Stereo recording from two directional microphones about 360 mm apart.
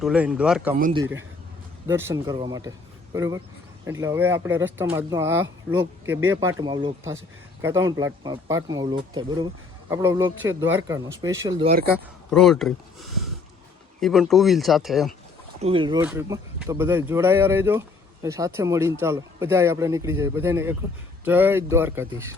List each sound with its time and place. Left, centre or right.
0.0 s speech: centre
0.8 s speech: right
1.9 s speech: centre
11.7 s speech: right
12.3 s speech: centre
15.6 s speech: centre